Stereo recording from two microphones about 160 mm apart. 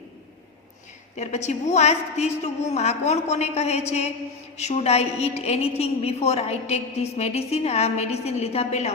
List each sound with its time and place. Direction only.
1.1 s a woman's voice: 45° left (ahead or behind)